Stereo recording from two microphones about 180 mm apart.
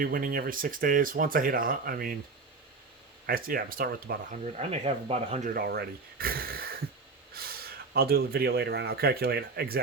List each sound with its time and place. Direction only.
0.0 s speech: 50° right (ahead or behind)
3.2 s speech: 55° right (ahead or behind)
4.5 s speech: 35° right (ahead or behind)
5.5 s speech: 60° right (ahead or behind)
7.3 s a sound: 60° right (ahead or behind)
7.9 s speech: 60° right (ahead or behind)